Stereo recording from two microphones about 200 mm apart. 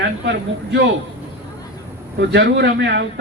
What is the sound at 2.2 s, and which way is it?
Speech, 55° right (ahead or behind).